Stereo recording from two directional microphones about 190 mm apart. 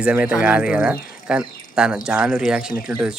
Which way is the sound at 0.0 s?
5° right (ahead or behind).